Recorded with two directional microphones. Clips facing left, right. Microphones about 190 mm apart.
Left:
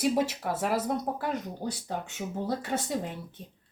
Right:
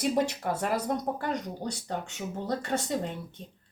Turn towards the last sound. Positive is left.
turn(degrees=5)  # may be behind; listen again after turning